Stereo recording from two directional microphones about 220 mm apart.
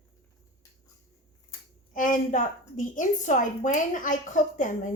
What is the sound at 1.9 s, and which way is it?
A woman's voice, 35° left (ahead or behind).